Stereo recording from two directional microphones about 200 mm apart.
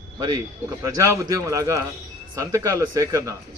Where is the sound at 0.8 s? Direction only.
15° right (ahead or behind).